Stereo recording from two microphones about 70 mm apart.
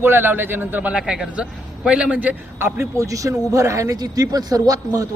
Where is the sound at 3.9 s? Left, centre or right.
Right.